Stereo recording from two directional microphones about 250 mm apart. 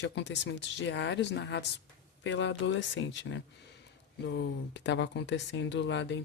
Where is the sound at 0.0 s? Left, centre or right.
Left.